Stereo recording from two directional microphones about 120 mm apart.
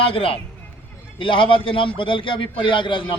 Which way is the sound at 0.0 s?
50° left (ahead or behind).